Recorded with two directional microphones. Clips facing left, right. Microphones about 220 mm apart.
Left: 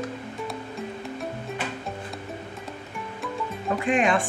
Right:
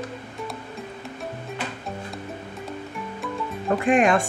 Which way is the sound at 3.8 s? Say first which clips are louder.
Right 3 dB; 45° right (ahead or behind).